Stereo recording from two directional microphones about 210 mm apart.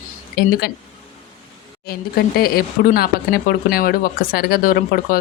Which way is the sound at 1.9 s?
45° left (ahead or behind).